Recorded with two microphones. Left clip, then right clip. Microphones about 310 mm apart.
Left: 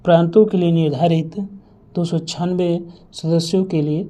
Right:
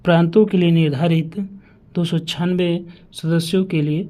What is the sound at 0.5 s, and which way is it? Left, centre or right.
Speech, right.